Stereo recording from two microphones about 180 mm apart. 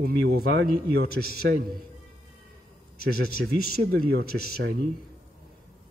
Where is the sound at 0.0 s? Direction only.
60° right (ahead or behind).